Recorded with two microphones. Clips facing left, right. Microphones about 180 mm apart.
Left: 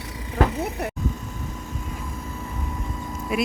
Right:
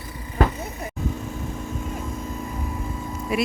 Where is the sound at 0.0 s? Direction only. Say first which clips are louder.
Even; 85° left; by 0.9 s 70° left (ahead or behind).